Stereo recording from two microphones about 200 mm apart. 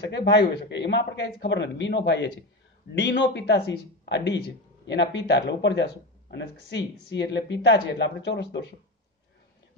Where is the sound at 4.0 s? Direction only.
60° left (ahead or behind).